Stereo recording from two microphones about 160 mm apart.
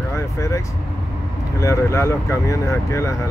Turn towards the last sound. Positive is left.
turn(degrees=20)  # may be behind; listen again after turning